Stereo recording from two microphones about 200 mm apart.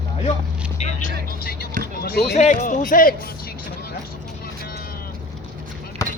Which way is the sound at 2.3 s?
35° left (ahead or behind).